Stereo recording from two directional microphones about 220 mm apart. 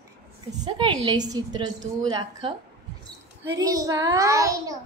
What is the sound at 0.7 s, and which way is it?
Speech, 20° right (ahead or behind).